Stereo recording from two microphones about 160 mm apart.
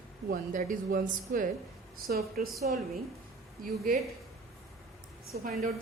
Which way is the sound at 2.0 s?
70° right (ahead or behind).